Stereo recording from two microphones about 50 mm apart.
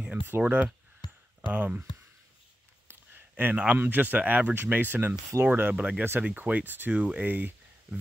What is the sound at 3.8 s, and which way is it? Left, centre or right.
Speech, right.